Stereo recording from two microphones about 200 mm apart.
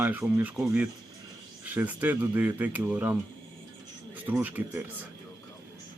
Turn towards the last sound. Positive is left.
turn(degrees=-10)  # may be behind; listen again after turning